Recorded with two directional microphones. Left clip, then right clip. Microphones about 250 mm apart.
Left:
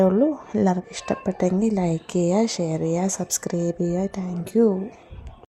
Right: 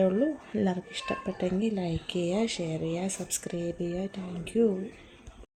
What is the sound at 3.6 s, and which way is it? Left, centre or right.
Speech, left.